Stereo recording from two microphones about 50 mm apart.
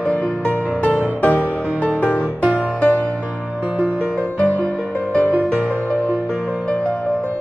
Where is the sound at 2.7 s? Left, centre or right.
Left.